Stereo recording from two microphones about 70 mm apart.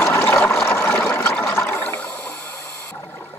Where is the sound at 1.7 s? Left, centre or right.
Left.